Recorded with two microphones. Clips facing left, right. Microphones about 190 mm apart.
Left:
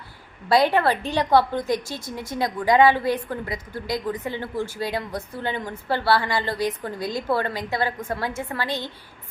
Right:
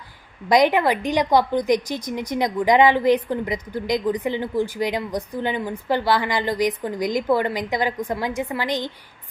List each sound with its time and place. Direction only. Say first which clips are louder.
0.4 s a woman's voice: right 2 dB; 15° right (ahead or behind)